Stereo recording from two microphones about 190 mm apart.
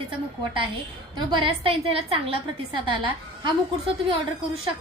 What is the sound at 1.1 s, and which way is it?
A woman's voice, 25° right (ahead or behind).